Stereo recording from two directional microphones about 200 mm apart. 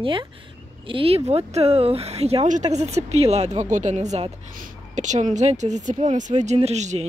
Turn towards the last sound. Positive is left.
turn(degrees=-35)  # may be behind; listen again after turning